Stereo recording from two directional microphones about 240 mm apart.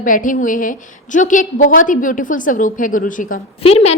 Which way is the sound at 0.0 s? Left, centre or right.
Left.